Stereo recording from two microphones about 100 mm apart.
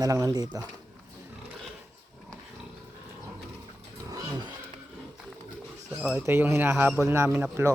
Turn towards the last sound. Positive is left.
turn(degrees=-15)  # may be behind; listen again after turning